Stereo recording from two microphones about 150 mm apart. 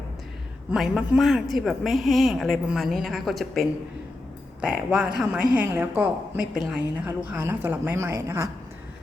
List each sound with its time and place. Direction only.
0.7 s a woman's voice: 5° right (ahead or behind)